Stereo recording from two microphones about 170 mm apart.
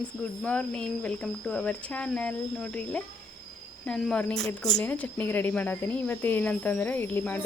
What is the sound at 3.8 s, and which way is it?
Speech, 5° left (ahead or behind).